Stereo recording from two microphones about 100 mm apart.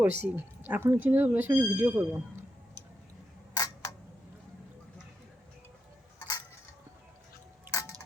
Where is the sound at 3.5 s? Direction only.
40° left (ahead or behind).